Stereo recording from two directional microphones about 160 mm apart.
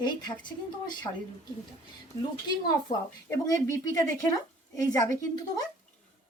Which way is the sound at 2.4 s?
25° left (ahead or behind).